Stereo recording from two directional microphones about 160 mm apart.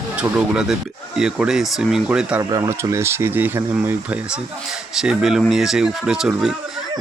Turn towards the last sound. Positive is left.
turn(degrees=-5)  # may be behind; listen again after turning